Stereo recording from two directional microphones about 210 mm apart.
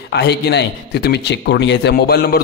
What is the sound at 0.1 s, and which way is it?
A man's voice, 50° left (ahead or behind).